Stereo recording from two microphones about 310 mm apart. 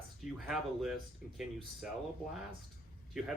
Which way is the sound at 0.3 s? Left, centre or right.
Centre.